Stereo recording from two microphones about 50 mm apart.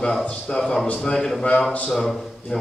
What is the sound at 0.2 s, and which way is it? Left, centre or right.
A man's voice, centre.